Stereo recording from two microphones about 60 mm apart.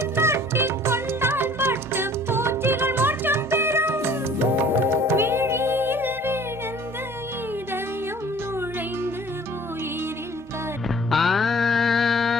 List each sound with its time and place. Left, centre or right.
0.0 s music: right
11.1 s music: centre